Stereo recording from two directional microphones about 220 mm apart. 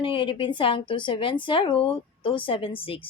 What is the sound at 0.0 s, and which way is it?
Speech, 20° left (ahead or behind).